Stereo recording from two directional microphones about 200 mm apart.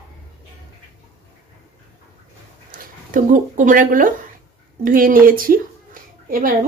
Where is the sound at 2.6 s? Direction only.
45° right (ahead or behind).